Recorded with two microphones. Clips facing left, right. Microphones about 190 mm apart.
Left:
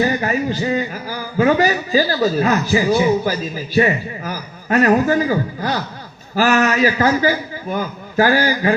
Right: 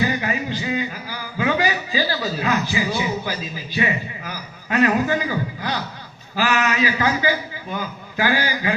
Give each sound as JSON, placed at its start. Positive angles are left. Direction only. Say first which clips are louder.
{"t": 0.0, "sound": "a man's voice", "louder": "left 5 dB", "side_deg": 45}